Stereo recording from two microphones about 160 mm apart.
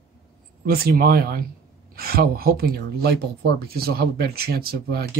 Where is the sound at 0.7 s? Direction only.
70° right (ahead or behind).